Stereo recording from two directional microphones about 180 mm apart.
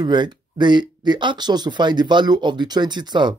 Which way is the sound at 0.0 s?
25° right (ahead or behind).